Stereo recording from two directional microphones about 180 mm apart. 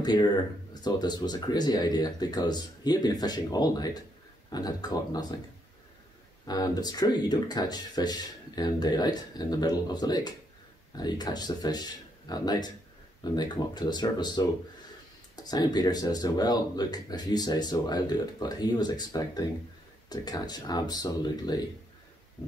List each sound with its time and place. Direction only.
0.0 s speech: 25° left (ahead or behind)
6.4 s speech: 20° left (ahead or behind)